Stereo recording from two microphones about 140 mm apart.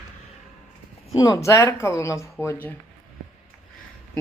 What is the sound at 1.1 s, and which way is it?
Speech, 25° left (ahead or behind).